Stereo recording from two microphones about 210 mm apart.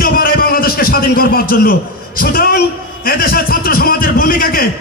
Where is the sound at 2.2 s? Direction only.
45° left (ahead or behind).